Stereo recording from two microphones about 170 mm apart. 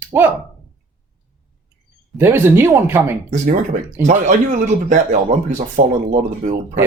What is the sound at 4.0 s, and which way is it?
Speech, 45° right (ahead or behind).